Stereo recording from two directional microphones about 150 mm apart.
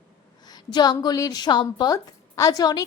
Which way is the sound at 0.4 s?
25° left (ahead or behind).